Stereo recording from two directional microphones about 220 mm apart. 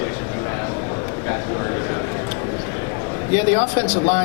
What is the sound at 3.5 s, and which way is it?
Speech, 15° left (ahead or behind).